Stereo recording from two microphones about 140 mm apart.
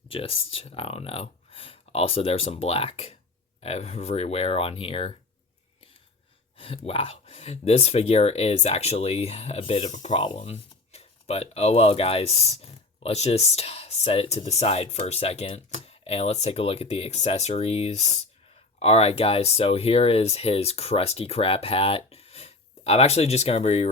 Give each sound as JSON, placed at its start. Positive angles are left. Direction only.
{"t": 0.1, "sound": "speech", "side_deg": 45}
{"t": 6.6, "sound": "speech", "side_deg": 40}
{"t": 10.2, "sound": "speech", "side_deg": 40}